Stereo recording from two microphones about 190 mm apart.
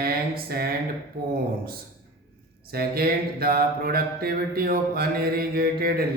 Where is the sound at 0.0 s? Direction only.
50° right (ahead or behind).